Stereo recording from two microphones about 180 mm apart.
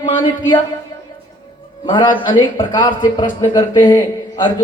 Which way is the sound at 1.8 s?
25° left (ahead or behind).